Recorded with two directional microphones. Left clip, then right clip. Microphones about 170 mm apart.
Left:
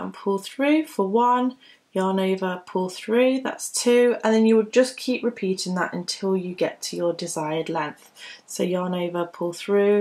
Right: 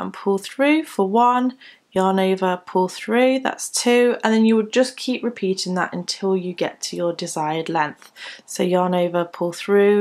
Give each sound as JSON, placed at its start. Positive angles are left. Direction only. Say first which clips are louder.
{"t": 0.0, "sound": "speech", "louder": "right 4 dB", "side_deg": -30}